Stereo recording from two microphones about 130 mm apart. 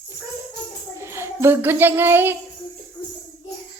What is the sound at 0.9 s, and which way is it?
Speech, 20° right (ahead or behind).